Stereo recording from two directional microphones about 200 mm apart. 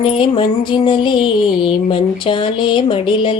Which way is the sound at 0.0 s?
25° left (ahead or behind).